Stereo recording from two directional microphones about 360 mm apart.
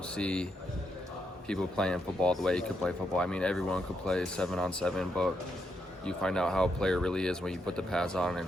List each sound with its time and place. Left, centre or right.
0.2 s speech: centre
1.5 s speech: centre